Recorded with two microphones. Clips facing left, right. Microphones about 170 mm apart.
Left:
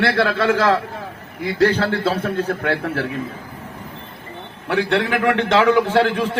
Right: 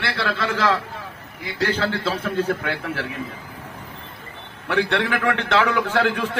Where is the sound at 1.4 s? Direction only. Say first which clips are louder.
Left 6 dB; 55° left (ahead or behind).